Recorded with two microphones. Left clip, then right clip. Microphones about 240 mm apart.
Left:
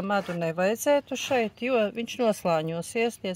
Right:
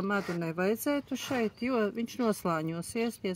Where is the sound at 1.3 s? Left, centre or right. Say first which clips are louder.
Left 6 dB; left.